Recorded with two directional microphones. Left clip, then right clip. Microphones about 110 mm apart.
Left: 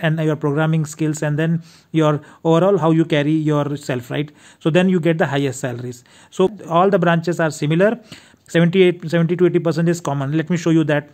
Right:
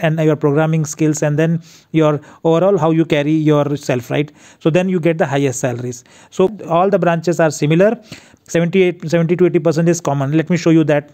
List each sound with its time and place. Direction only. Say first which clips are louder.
0.0 s a man's voice: right 5 dB; 35° right (ahead or behind)
3.1 s a man's voice: right 4 dB; 50° right (ahead or behind); by 11.1 s 30° right (ahead or behind)